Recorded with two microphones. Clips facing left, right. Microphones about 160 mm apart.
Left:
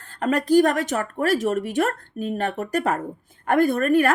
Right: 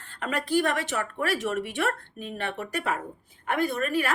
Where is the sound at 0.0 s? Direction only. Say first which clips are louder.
Left 8 dB; 40° left (ahead or behind).